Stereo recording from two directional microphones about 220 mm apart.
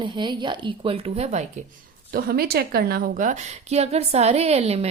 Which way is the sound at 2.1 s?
45° right (ahead or behind).